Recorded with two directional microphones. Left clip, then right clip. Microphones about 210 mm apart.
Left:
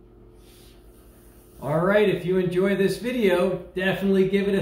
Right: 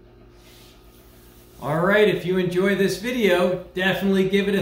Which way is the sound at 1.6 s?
Centre (ahead or behind).